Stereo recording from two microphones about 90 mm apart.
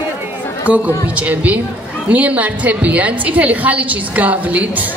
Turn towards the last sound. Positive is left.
turn(degrees=-15)  # may be behind; listen again after turning